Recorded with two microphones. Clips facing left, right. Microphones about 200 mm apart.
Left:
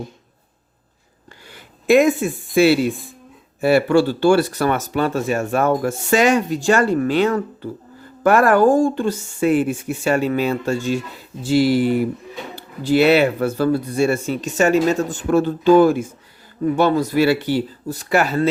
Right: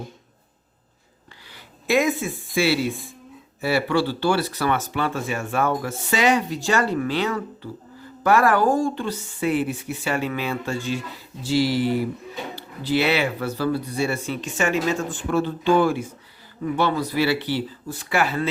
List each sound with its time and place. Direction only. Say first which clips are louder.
1.5 s speech: left 8 dB; 50° left (ahead or behind)